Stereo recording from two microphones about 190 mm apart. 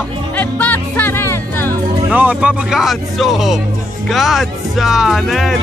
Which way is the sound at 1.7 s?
10° right (ahead or behind).